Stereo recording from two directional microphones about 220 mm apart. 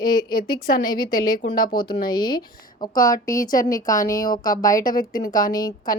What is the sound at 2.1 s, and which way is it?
A woman's voice, 20° left (ahead or behind).